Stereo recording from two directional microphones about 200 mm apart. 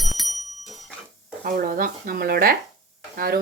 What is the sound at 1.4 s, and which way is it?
Speech, 45° right (ahead or behind).